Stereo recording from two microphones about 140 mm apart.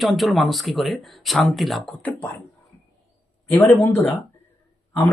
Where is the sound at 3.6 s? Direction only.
20° left (ahead or behind).